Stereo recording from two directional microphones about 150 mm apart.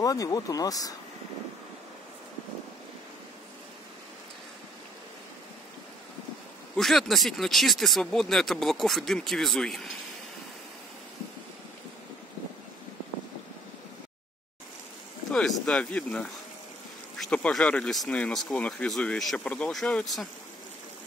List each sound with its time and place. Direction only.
0.0 s speech: 25° left (ahead or behind)
6.8 s speech: centre (ahead or behind)
15.3 s speech: 5° left (ahead or behind)